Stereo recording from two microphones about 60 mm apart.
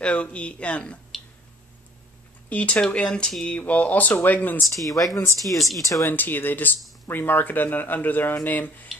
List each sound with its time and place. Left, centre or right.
0.0 s speech: centre
1.1 s a sound: centre
2.5 s speech: left
3.5 s speech: left
4.8 s speech: left
5.4 s speech: centre
5.8 s speech: left
6.0 s speech: left